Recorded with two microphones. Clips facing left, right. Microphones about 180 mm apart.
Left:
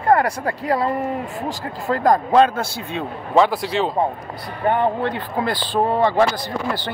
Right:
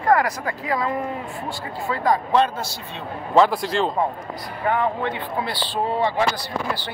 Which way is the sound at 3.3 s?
Centre (ahead or behind).